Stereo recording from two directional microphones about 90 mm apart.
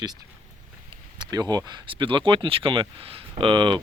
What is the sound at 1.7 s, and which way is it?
Speech, 70° right (ahead or behind).